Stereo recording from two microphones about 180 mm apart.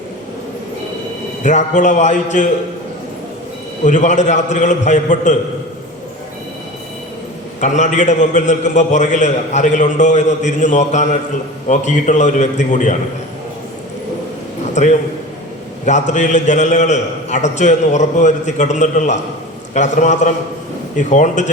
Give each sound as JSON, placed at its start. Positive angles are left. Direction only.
{"t": 1.5, "sound": "a man's voice", "side_deg": 40}
{"t": 3.8, "sound": "a man's voice", "side_deg": 45}
{"t": 7.6, "sound": "a man's voice", "side_deg": 40}
{"t": 14.8, "sound": "a man's voice", "side_deg": 40}